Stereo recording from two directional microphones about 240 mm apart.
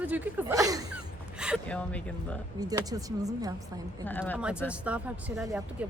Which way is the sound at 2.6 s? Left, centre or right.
Centre.